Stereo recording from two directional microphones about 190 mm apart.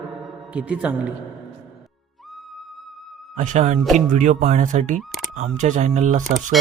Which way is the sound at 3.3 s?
40° right (ahead or behind).